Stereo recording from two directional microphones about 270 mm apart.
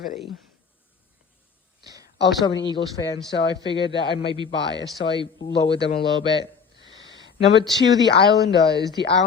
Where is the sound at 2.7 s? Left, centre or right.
Centre.